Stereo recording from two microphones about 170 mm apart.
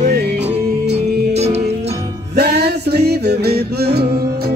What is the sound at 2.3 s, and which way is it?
Music, 75° right (ahead or behind).